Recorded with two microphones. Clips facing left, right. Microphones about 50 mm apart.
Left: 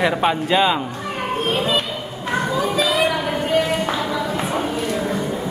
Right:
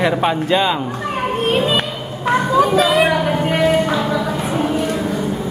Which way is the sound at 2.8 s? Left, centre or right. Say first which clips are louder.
Right 4 dB; right.